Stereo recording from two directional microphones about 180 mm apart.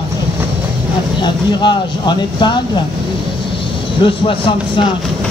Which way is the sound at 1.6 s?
25° left (ahead or behind).